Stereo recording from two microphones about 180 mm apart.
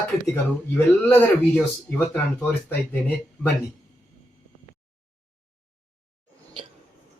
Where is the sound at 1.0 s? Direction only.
10° left (ahead or behind).